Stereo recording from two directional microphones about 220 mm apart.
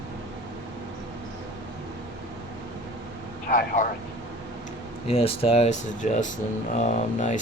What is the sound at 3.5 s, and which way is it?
Speech, 35° left (ahead or behind).